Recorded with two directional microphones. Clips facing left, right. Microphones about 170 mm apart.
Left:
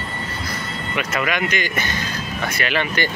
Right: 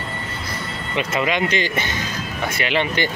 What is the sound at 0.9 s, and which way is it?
Speech, 25° right (ahead or behind).